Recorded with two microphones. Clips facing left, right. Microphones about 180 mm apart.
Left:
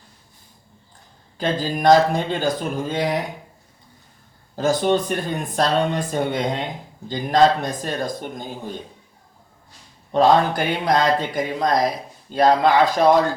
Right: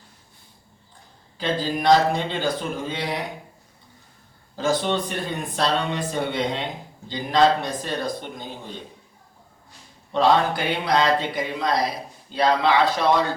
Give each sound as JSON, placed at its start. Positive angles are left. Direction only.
{"t": 1.4, "sound": "speech", "side_deg": 45}
{"t": 4.5, "sound": "speech", "side_deg": 45}
{"t": 10.1, "sound": "speech", "side_deg": 45}